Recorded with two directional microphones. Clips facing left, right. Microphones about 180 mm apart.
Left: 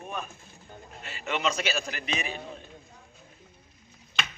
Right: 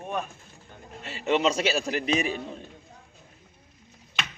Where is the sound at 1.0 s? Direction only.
35° right (ahead or behind).